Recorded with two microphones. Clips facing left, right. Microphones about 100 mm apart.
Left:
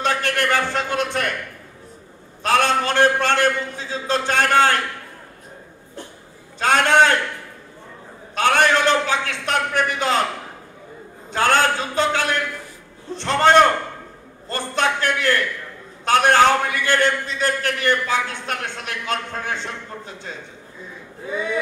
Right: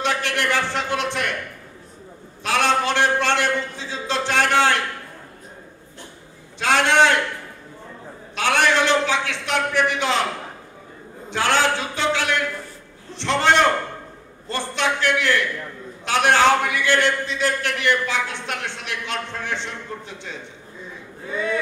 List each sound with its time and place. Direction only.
0.0 s a man's voice: 45° left (ahead or behind)
2.4 s a man's voice: 45° left (ahead or behind)
6.6 s a man's voice: 45° left (ahead or behind)
8.4 s a man's voice: 45° left (ahead or behind)
11.3 s a man's voice: 45° left (ahead or behind)